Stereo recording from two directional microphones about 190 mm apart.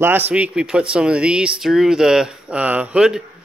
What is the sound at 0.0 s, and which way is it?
A man's voice, 10° right (ahead or behind).